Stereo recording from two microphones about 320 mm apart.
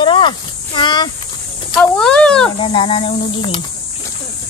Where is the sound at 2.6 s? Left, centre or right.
Centre.